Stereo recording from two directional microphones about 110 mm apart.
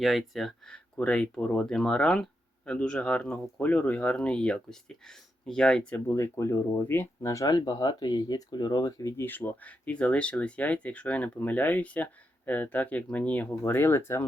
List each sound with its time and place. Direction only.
0.0 s speech: centre (ahead or behind)
6.1 s speech: 25° left (ahead or behind)